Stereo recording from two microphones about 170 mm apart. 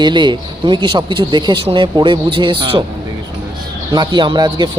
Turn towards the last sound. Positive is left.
turn(degrees=-25)  # may be behind; listen again after turning